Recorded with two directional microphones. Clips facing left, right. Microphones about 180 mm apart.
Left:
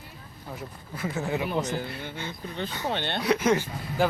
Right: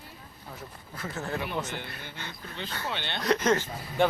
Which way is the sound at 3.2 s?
10° left (ahead or behind).